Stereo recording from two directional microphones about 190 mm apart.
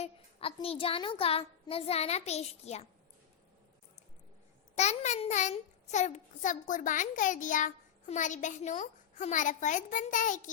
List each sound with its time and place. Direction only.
0.0 s a child's voice: 30° left (ahead or behind)
4.7 s a child's voice: 35° left (ahead or behind)